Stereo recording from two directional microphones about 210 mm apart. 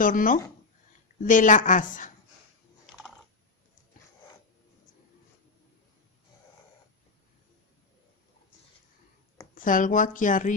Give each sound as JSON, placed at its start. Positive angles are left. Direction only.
{"t": 0.0, "sound": "a woman's voice", "side_deg": 40}
{"t": 9.6, "sound": "a woman's voice", "side_deg": 40}